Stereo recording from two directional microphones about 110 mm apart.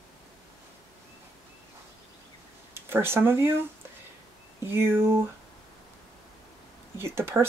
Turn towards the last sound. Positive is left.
turn(degrees=-20)  # may be behind; listen again after turning